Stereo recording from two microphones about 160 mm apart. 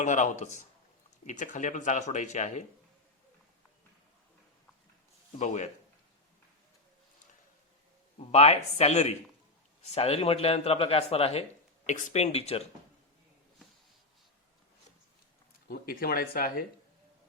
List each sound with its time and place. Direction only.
0.0 s speech: 50° left (ahead or behind)
8.2 s a man's voice: 40° left (ahead or behind)
11.9 s speech: 50° left (ahead or behind)
15.6 s speech: 65° left (ahead or behind)